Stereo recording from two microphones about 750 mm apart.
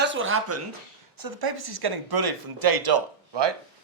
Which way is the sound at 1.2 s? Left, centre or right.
Right.